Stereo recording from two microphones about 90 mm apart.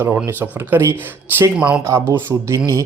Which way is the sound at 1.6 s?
10° right (ahead or behind).